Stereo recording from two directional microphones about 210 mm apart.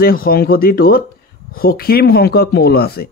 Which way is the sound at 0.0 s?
45° left (ahead or behind).